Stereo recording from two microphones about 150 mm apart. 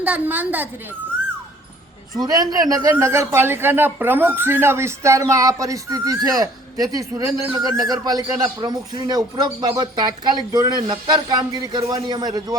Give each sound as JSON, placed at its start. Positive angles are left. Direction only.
{"t": 0.0, "sound": "a woman's voice", "side_deg": -10}
{"t": 2.1, "sound": "a man's voice", "side_deg": -25}